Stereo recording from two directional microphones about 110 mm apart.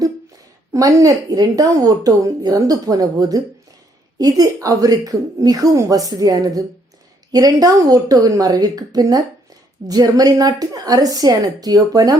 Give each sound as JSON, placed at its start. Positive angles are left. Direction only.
{"t": 0.7, "sound": "a woman's voice", "side_deg": -30}